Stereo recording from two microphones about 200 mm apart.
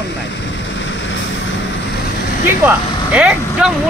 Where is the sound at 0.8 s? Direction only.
70° left (ahead or behind).